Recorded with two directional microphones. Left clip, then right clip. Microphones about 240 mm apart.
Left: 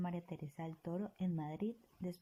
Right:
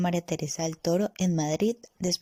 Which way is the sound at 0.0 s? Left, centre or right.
Right.